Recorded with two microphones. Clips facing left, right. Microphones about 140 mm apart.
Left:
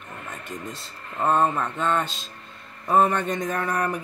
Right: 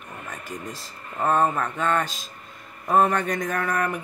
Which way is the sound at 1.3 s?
5° right (ahead or behind).